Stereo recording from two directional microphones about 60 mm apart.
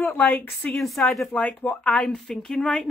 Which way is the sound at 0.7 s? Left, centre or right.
Centre.